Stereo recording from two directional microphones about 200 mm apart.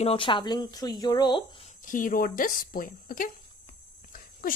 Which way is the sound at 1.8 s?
40° left (ahead or behind).